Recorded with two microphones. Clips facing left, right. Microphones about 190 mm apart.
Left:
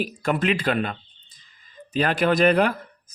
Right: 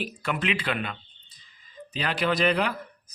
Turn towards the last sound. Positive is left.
turn(degrees=50)  # may be behind; listen again after turning